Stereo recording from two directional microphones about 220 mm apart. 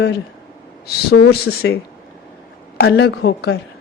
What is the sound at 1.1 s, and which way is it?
Speech, 45° left (ahead or behind).